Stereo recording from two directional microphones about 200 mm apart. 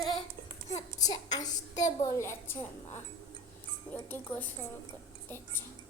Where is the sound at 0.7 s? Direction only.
35° left (ahead or behind).